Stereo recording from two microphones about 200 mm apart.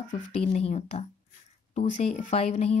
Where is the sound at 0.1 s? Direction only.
35° left (ahead or behind).